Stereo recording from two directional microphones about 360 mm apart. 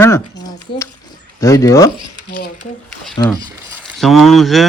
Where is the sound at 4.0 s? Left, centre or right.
Centre.